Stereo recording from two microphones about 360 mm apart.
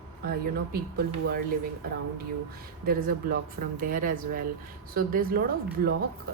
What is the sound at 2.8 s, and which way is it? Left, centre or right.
Speech, right.